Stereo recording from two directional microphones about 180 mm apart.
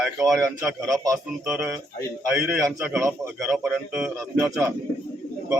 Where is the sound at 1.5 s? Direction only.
5° right (ahead or behind).